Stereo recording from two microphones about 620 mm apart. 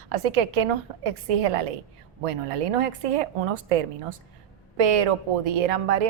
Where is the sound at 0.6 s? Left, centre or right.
Right.